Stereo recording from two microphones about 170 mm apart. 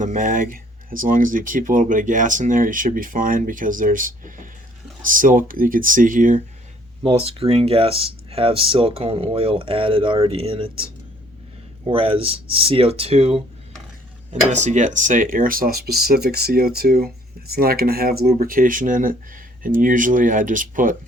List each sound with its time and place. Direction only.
0.0 s speech: 50° right (ahead or behind)
7.0 s speech: 35° right (ahead or behind)
11.9 s speech: 30° right (ahead or behind)
14.5 s speech: 45° right (ahead or behind)